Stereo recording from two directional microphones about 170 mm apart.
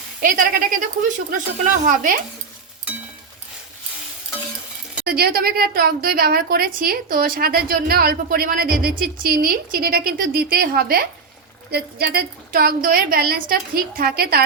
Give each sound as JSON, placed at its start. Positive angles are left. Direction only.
{"t": 0.2, "sound": "speech", "side_deg": -55}
{"t": 5.0, "sound": "a woman's voice", "side_deg": -65}